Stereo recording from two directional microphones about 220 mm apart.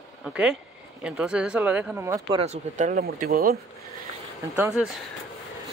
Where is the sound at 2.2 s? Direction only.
25° right (ahead or behind); by 3.5 s 45° right (ahead or behind).